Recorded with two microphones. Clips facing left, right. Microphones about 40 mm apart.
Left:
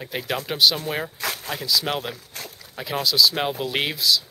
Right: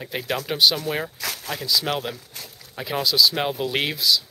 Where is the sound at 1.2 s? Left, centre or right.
Left.